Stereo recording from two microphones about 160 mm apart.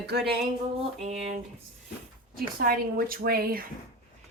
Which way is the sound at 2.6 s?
70° right (ahead or behind).